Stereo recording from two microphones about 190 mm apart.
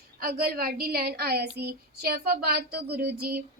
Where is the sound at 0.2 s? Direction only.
50° right (ahead or behind).